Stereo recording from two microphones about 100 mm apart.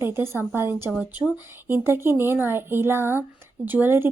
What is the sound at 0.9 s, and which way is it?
Speech, 5° right (ahead or behind).